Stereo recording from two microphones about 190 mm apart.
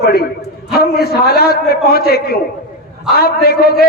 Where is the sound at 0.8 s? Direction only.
55° left (ahead or behind).